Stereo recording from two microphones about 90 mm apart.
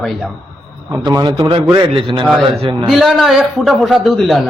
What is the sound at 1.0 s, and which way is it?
Speech, 50° right (ahead or behind).